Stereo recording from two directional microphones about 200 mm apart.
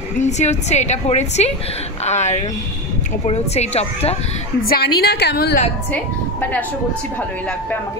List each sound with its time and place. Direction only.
0.2 s a woman's voice: 35° left (ahead or behind)
4.6 s a woman's voice: 50° left (ahead or behind)